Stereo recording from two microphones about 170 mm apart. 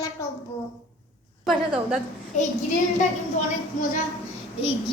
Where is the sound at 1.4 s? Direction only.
Centre (ahead or behind).